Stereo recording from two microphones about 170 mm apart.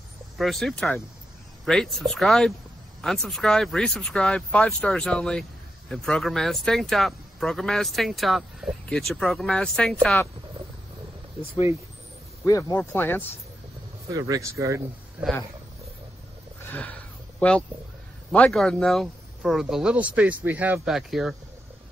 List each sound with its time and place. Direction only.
0.4 s speech: centre (ahead or behind)
12.4 s speech: 20° left (ahead or behind)
14.1 s speech: 20° right (ahead or behind)
16.6 s a sound: 10° left (ahead or behind)
17.4 s speech: 5° left (ahead or behind)